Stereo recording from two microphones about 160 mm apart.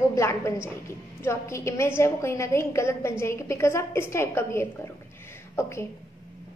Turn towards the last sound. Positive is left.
turn(degrees=15)  # may be behind; listen again after turning